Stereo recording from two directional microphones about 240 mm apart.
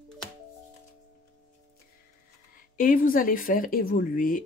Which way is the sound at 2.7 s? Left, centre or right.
Left.